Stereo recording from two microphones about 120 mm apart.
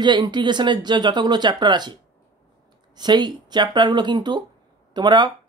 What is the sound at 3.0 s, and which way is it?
Speech, 35° right (ahead or behind).